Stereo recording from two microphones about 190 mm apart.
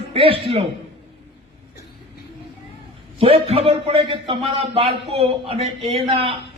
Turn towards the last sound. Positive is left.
turn(degrees=-30)  # may be behind; listen again after turning